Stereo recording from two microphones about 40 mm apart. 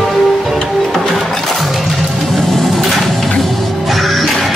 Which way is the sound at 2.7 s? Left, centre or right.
Centre.